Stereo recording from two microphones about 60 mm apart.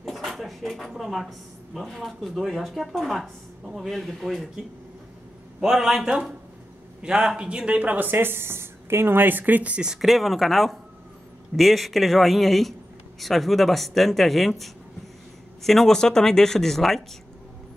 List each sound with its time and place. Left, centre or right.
0.0 s speech: centre
5.6 s a man's voice: centre; by 9.8 s right
9.8 s speech: centre